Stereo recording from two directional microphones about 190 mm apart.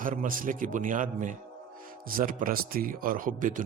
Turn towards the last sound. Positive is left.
turn(degrees=-45)  # may be behind; listen again after turning